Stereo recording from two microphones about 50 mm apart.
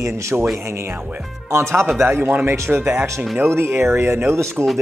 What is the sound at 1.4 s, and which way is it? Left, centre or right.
Speech, right.